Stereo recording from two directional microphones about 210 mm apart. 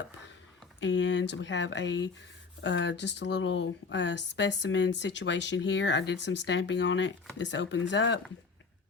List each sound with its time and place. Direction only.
0.8 s a woman's voice: 60° left (ahead or behind)